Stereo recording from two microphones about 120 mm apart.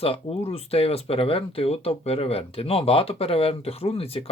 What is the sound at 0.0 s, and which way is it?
Speech, 55° left (ahead or behind).